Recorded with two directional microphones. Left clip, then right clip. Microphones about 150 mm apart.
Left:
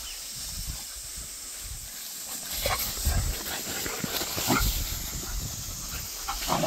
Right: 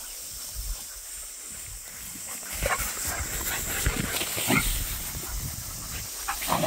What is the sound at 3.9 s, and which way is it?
Pig, 5° right (ahead or behind).